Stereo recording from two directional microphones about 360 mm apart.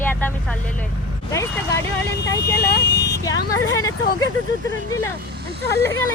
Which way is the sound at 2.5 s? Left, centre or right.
Left.